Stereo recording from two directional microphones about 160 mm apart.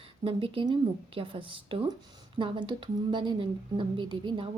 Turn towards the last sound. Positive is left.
turn(degrees=-30)  # may be behind; listen again after turning